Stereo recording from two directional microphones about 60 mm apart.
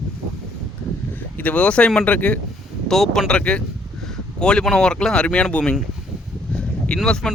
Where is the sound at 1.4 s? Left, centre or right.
Left.